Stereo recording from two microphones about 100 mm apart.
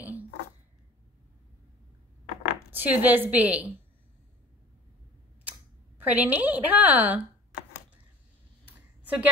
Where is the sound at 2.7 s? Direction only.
20° right (ahead or behind).